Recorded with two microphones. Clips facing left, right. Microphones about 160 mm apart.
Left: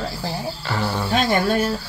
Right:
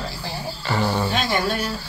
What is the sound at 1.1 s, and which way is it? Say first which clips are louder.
Speech: left 4 dB; 50° left (ahead or behind).